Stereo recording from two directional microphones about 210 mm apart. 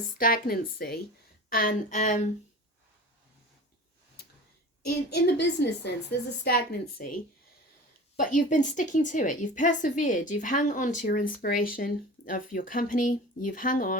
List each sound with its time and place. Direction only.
0.2 s speech: 40° left (ahead or behind)
5.1 s speech: 50° left (ahead or behind)
8.1 s speech: 40° left (ahead or behind)